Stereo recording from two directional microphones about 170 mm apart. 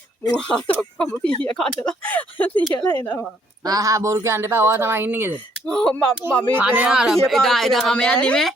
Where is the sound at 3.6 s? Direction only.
20° right (ahead or behind).